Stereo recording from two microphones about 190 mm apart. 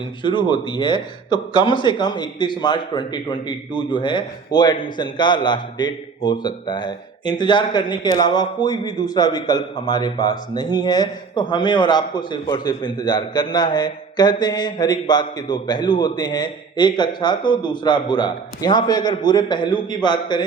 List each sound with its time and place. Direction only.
0.2 s a man's voice: 25° left (ahead or behind)